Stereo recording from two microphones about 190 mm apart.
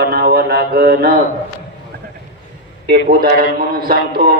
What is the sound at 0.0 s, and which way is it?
Mantra, 60° right (ahead or behind).